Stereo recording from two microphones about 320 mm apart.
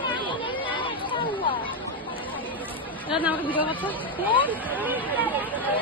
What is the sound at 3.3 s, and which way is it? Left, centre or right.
Speech, centre.